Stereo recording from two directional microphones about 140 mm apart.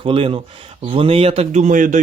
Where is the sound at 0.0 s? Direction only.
40° right (ahead or behind).